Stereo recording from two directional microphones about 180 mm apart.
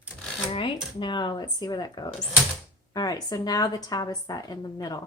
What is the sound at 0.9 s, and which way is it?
A woman's voice, 25° left (ahead or behind).